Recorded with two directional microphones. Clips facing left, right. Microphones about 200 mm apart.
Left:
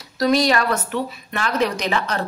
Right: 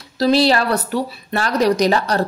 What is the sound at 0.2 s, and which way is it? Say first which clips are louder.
A woman's voice: right 3 dB; 30° right (ahead or behind).